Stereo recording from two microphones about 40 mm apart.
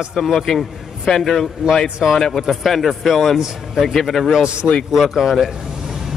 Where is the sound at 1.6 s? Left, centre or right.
Centre.